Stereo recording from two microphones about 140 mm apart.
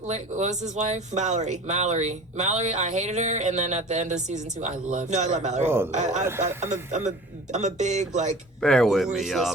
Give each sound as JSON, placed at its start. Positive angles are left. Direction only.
{"t": 0.1, "sound": "speech", "side_deg": -55}
{"t": 5.6, "sound": "a man's voice", "side_deg": -15}
{"t": 5.9, "sound": "speech", "side_deg": -60}
{"t": 8.6, "sound": "speech", "side_deg": 5}